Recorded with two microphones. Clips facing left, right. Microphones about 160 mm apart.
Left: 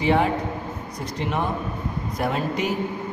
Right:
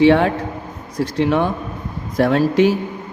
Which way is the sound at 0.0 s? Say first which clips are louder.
Right 7 dB; 80° right.